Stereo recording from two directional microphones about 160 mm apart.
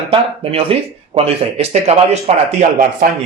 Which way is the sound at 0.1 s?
35° right (ahead or behind).